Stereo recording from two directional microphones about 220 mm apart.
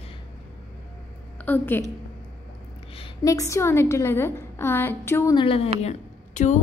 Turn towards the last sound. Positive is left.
turn(degrees=35)  # may be behind; listen again after turning